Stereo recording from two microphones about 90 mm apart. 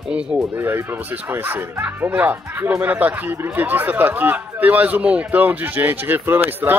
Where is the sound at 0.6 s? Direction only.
25° right (ahead or behind).